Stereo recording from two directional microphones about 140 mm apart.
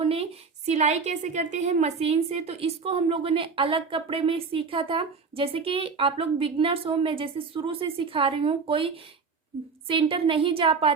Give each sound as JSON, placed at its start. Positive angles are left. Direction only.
{"t": 0.0, "sound": "a woman's voice", "side_deg": -45}